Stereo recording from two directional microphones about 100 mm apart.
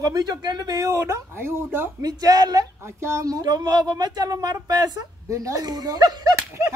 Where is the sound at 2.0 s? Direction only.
35° right (ahead or behind).